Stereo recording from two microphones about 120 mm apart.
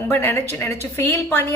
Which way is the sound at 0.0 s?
20° left (ahead or behind).